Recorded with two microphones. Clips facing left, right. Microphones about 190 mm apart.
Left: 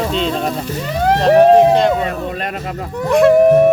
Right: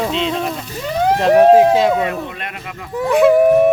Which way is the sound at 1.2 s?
Centre (ahead or behind).